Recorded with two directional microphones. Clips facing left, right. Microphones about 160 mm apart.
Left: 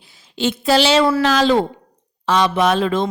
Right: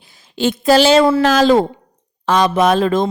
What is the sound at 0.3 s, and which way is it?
Speech, 50° right (ahead or behind).